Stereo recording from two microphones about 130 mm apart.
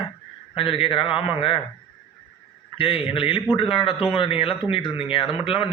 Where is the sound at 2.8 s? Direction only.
45° left (ahead or behind).